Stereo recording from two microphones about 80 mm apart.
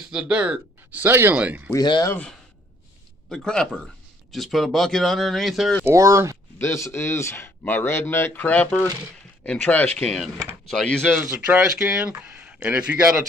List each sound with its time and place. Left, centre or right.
0.0 s speech: centre
1.0 s speech: right
1.8 s speech: left
3.3 s speech: centre
5.9 s speech: right
6.6 s speech: left; by 10.0 s centre
10.0 s speech: centre
11.2 s speech: centre